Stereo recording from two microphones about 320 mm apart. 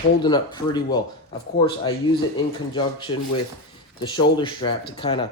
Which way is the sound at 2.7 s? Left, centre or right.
Centre.